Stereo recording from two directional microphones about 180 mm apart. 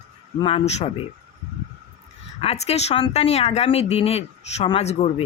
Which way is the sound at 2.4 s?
35° left (ahead or behind).